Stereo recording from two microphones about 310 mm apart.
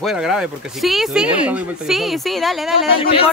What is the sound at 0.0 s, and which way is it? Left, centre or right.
Speech, centre.